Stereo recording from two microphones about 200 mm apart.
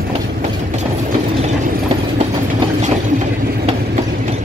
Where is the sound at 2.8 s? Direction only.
35° right (ahead or behind).